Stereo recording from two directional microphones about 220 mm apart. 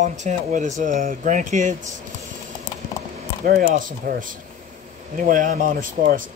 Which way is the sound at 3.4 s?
40° right (ahead or behind).